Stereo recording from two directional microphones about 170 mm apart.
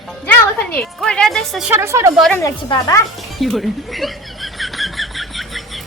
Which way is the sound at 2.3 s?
20° left (ahead or behind).